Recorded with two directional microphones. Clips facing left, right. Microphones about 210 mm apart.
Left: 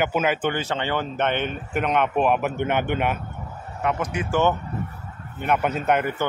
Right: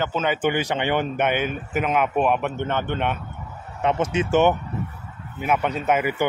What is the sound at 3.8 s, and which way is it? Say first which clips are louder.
Speech: right 4 dB; 25° right (ahead or behind).